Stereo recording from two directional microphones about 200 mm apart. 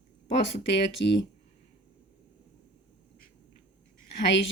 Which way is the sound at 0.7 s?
60° left (ahead or behind).